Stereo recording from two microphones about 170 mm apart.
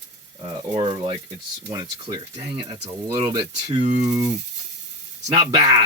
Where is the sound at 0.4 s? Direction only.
30° right (ahead or behind).